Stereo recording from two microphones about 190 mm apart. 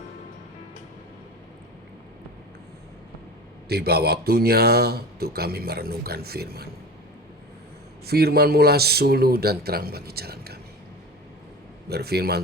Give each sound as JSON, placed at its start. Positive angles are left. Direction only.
{"t": 3.7, "sound": "speech", "side_deg": -55}
{"t": 8.0, "sound": "speech", "side_deg": -55}
{"t": 11.9, "sound": "speech", "side_deg": -55}